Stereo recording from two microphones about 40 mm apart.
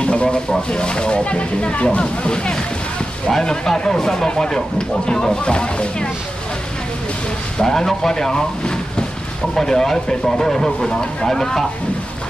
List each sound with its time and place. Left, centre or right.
0.0 s speech: left
7.5 s speech: centre